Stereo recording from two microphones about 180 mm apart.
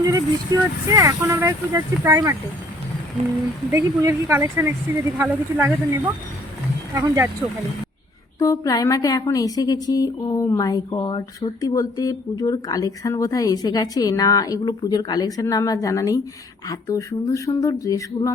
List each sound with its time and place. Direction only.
0.0 s speech: 20° right (ahead or behind)
3.7 s speech: 15° right (ahead or behind)
6.9 s speech: 15° right (ahead or behind)
8.4 s a woman's voice: 20° left (ahead or behind)